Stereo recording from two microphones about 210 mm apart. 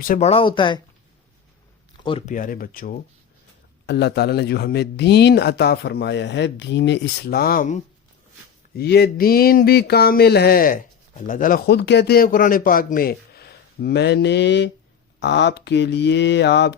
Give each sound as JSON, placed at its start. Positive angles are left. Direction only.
{"t": 0.1, "sound": "speech", "side_deg": 30}
{"t": 2.0, "sound": "speech", "side_deg": 25}
{"t": 2.3, "sound": "speech", "side_deg": 40}